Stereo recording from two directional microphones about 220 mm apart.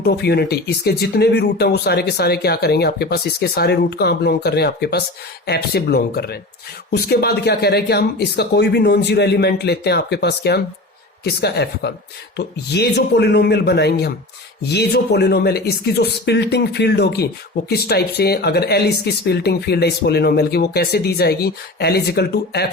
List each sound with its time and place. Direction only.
0.0 s speech: 45° left (ahead or behind)